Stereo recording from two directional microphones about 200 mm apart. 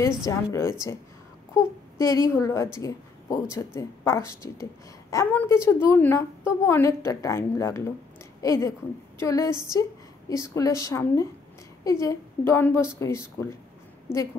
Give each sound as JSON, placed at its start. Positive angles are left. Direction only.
{"t": 0.2, "sound": "a woman's voice", "side_deg": 15}